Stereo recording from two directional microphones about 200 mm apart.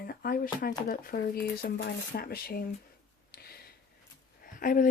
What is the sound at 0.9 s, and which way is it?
Speech, 50° left (ahead or behind).